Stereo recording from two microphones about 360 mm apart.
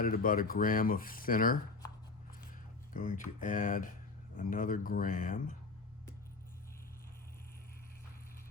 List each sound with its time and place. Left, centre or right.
0.0 s speech: left